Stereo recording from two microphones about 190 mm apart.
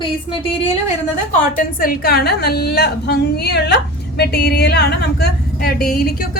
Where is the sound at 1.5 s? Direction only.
50° left (ahead or behind).